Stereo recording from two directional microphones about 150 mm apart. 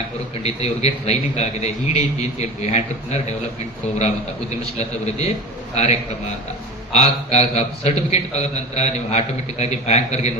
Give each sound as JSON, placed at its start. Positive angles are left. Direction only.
{"t": 0.4, "sound": "a man's voice", "side_deg": 45}
{"t": 4.8, "sound": "a man's voice", "side_deg": 45}